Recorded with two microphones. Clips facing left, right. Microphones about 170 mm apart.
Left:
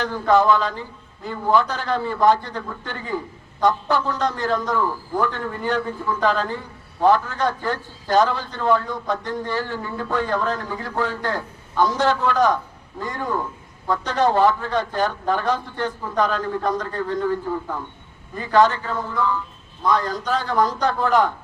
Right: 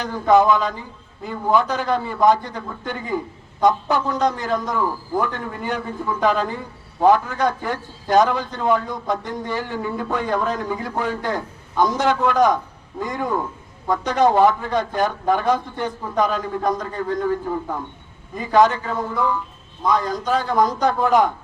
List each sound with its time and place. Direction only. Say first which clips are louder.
0.0 s a man's voice: right 2 dB; 15° right (ahead or behind)